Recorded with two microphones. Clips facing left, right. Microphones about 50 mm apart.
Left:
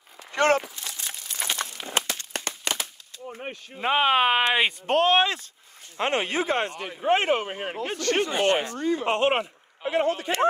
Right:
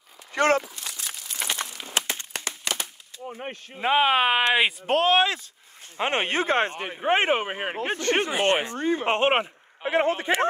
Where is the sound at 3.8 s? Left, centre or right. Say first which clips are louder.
Right 1 dB; centre.